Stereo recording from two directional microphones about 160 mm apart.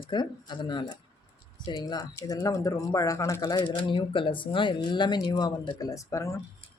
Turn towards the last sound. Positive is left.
turn(degrees=20)  # may be behind; listen again after turning